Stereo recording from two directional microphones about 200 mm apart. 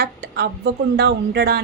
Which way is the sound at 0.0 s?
55° right (ahead or behind).